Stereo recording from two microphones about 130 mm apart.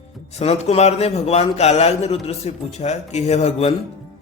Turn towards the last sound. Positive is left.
turn(degrees=55)  # may be behind; listen again after turning